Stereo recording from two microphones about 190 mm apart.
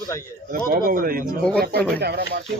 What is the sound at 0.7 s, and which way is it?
Speech, 50° right (ahead or behind).